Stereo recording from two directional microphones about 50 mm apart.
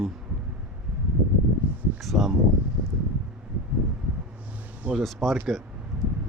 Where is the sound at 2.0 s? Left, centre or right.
Centre.